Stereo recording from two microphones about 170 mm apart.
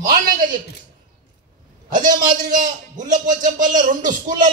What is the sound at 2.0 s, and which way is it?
A man's voice, 50° right (ahead or behind).